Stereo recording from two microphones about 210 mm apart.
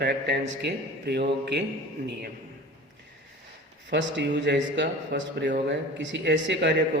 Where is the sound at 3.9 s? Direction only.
55° right (ahead or behind).